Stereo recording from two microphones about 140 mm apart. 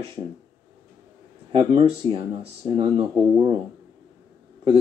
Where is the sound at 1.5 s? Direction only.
40° right (ahead or behind).